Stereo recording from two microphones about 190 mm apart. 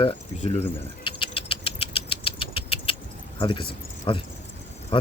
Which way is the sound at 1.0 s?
30° left (ahead or behind).